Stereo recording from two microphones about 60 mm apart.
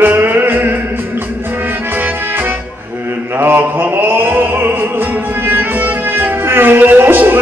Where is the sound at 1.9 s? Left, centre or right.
Right.